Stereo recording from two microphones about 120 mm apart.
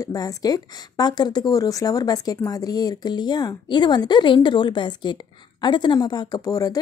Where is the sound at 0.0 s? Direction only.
30° left (ahead or behind).